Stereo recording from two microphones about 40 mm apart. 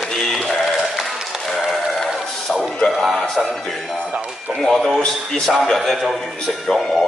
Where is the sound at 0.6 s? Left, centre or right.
Centre.